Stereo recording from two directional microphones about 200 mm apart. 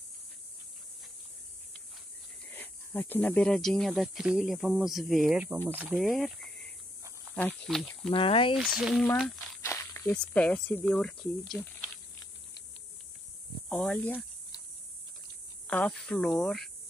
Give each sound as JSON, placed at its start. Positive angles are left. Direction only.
{"t": 2.5, "sound": "speech", "side_deg": 10}
{"t": 8.1, "sound": "speech", "side_deg": 25}
{"t": 8.5, "sound": "speech", "side_deg": -5}
{"t": 9.6, "sound": "speech", "side_deg": 15}
{"t": 13.7, "sound": "speech", "side_deg": 5}
{"t": 15.6, "sound": "speech", "side_deg": 5}